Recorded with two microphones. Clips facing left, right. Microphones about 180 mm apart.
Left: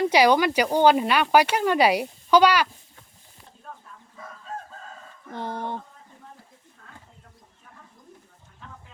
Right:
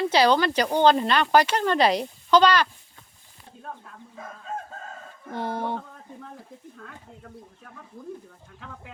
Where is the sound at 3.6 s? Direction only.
60° right (ahead or behind).